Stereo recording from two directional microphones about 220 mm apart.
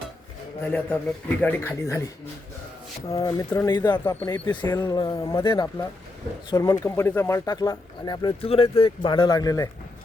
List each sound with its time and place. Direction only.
0.6 s speech: 5° left (ahead or behind)
3.1 s speech: 15° left (ahead or behind)